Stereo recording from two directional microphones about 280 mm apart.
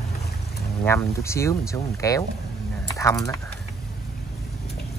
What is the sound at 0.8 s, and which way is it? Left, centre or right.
Speech, centre.